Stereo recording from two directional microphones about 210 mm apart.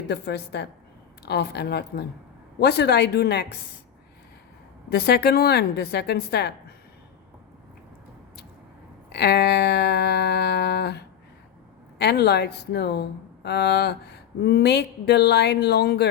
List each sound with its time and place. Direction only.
0.1 s speech: 55° left (ahead or behind)
4.9 s speech: 50° left (ahead or behind)
9.1 s speech: 50° left (ahead or behind)